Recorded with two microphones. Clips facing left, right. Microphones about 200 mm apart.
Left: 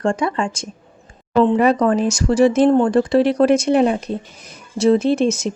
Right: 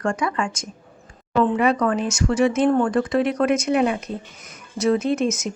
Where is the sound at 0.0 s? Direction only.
30° left (ahead or behind).